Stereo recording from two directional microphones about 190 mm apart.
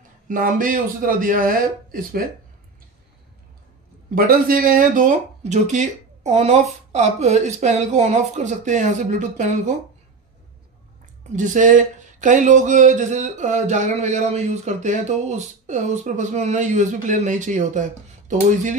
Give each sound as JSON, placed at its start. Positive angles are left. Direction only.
{"t": 0.3, "sound": "a man's voice", "side_deg": -45}
{"t": 4.1, "sound": "speech", "side_deg": -50}
{"t": 11.3, "sound": "speech", "side_deg": -40}